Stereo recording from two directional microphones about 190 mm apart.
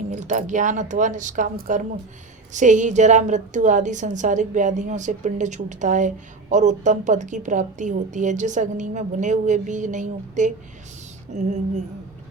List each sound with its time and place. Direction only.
0.1 s a woman's voice: 40° right (ahead or behind)